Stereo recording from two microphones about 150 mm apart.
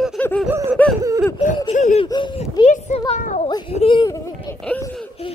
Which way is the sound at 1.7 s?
55° left (ahead or behind).